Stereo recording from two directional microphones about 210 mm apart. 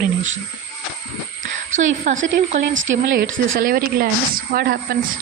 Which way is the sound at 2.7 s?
65° right (ahead or behind).